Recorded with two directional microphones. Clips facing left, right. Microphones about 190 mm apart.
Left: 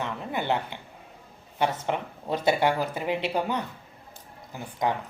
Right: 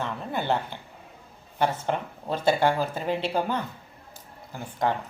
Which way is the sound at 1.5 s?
15° left (ahead or behind).